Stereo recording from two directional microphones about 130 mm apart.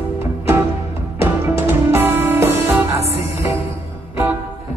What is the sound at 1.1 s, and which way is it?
Music, 20° right (ahead or behind).